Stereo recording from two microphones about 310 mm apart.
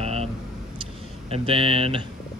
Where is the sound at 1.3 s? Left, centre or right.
Centre.